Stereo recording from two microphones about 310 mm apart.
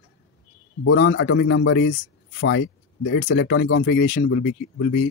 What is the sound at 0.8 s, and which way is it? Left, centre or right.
Speech, left.